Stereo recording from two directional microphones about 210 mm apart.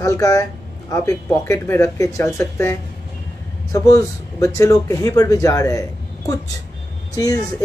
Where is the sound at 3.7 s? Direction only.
15° left (ahead or behind).